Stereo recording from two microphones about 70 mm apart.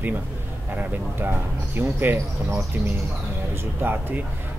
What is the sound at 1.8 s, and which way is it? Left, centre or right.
Speech, right.